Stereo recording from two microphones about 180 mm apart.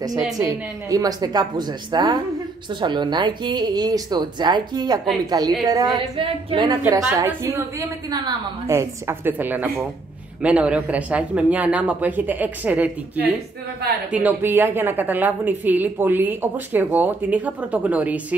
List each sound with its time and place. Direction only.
0.4 s a woman's voice: 20° right (ahead or behind)
7.2 s a woman's voice: 15° right (ahead or behind)